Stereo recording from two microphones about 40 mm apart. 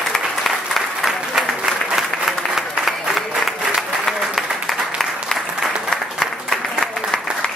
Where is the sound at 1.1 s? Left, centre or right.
Centre.